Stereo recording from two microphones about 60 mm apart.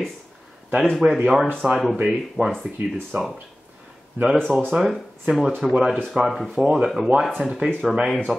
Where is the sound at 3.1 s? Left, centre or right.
Right.